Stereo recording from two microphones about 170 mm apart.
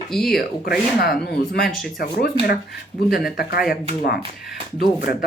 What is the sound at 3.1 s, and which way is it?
Speech, 65° left (ahead or behind).